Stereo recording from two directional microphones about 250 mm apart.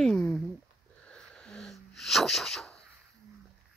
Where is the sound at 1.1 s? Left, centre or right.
Centre.